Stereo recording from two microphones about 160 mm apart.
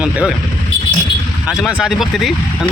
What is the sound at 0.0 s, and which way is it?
Speech, 5° right (ahead or behind).